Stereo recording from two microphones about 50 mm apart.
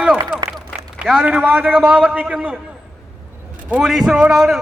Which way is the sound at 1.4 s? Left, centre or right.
Right.